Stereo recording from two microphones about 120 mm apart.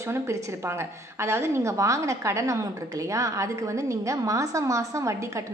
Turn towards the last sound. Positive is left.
turn(degrees=-25)  # may be behind; listen again after turning